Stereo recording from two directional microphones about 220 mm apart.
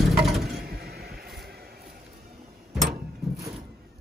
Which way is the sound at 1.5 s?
45° right (ahead or behind).